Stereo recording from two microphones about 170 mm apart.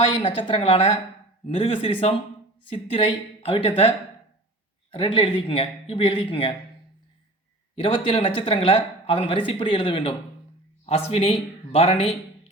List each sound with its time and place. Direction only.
0.0 s speech: 30° left (ahead or behind)
7.8 s speech: 30° left (ahead or behind)